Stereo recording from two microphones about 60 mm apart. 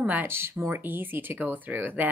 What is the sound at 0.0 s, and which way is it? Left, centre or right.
Speech, right.